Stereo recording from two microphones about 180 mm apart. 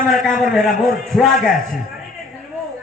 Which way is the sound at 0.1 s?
Centre (ahead or behind).